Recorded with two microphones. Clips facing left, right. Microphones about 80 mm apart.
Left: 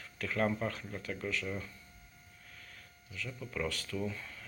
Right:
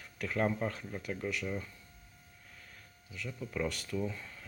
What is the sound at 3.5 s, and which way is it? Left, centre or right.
Speech, right.